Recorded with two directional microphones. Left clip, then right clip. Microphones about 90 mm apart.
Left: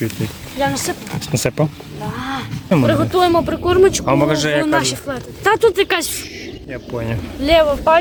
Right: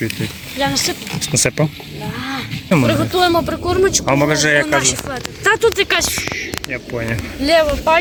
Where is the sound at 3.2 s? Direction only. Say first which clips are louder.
Even; 20° left (ahead or behind).